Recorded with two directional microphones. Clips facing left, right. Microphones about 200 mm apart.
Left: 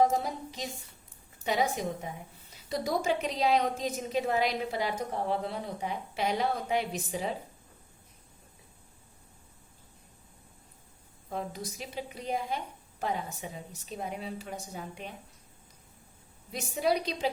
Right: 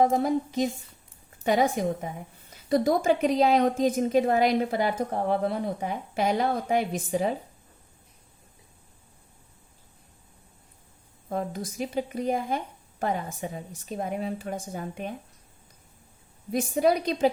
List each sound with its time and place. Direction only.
0.0 s a woman's voice: 50° right (ahead or behind)
11.3 s a woman's voice: 50° right (ahead or behind)
16.5 s a woman's voice: 50° right (ahead or behind)